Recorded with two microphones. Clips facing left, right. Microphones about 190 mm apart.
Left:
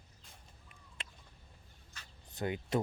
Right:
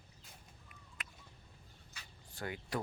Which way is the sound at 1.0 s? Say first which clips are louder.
Left 1 dB; 25° left (ahead or behind).